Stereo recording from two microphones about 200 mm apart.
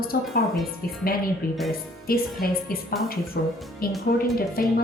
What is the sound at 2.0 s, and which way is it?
A woman's voice, 45° left (ahead or behind).